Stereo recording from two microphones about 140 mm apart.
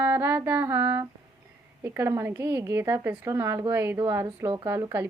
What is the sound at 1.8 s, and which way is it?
A woman's voice, 20° right (ahead or behind).